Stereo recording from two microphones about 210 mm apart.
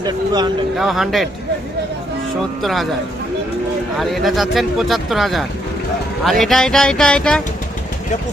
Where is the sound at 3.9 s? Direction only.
Centre (ahead or behind).